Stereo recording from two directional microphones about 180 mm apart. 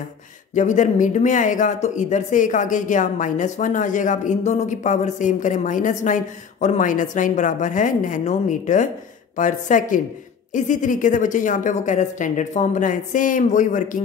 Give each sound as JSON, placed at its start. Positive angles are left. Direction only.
{"t": 0.6, "sound": "speech", "side_deg": 45}